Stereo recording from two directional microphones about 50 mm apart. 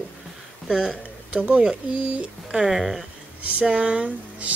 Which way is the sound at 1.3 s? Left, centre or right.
Right.